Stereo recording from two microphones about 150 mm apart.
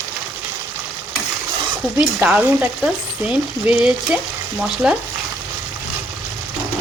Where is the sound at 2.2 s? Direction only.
10° right (ahead or behind).